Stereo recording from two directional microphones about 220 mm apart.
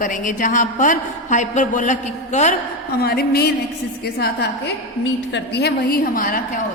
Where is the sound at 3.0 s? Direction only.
45° left (ahead or behind).